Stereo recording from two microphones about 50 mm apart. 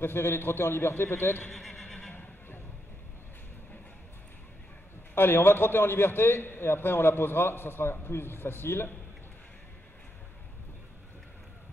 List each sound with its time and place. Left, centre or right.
0.0 s a man's voice: left
1.5 s a sound: centre
5.1 s a man's voice: left